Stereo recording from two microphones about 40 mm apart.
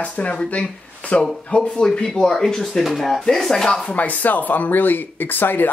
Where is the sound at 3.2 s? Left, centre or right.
Centre.